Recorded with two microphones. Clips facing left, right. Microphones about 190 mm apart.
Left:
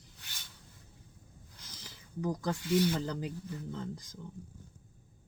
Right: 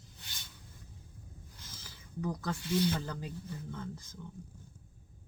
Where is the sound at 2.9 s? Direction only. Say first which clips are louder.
Left 4 dB; 15° left (ahead or behind).